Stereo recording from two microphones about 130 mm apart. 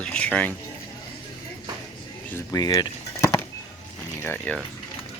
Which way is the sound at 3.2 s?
20° left (ahead or behind).